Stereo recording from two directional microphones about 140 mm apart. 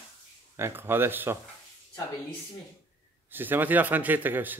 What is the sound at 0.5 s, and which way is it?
Speech, 20° right (ahead or behind).